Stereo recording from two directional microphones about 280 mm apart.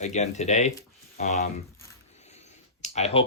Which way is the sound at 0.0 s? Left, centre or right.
Left.